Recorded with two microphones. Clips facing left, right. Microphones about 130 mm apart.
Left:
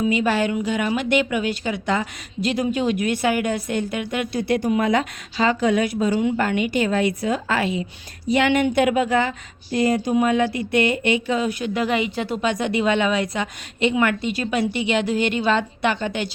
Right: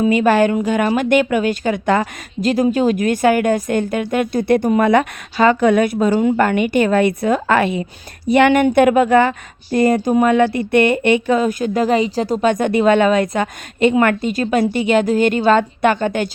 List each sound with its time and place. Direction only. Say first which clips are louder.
0.0 s a woman's voice: right 7 dB; 50° right (ahead or behind)